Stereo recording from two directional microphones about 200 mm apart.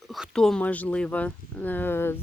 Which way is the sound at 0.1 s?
Centre (ahead or behind).